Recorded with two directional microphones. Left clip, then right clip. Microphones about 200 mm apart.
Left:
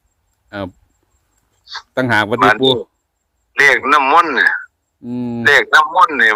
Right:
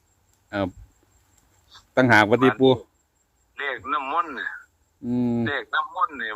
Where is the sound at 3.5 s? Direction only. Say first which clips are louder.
Left 17 dB; 50° left (ahead or behind).